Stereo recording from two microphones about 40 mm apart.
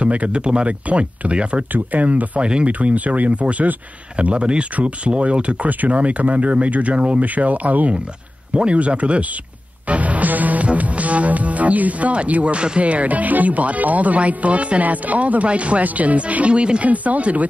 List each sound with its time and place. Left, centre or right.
0.0 s music: right
0.7 s music: right
1.7 s music: right
4.2 s speech: right
4.7 s music: right
16.9 s music: right